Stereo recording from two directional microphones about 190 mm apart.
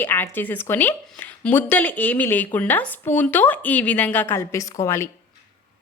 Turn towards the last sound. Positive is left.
turn(degrees=15)  # may be behind; listen again after turning